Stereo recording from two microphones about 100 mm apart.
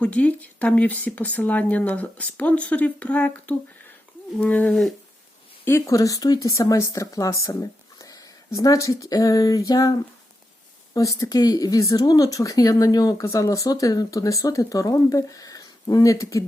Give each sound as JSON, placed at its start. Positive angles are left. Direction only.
{"t": 0.0, "sound": "speech", "side_deg": 15}
{"t": 4.7, "sound": "a sound", "side_deg": 0}
{"t": 5.6, "sound": "speech", "side_deg": 30}
{"t": 7.4, "sound": "a sound", "side_deg": 35}
{"t": 8.5, "sound": "speech", "side_deg": 35}
{"t": 10.9, "sound": "speech", "side_deg": 30}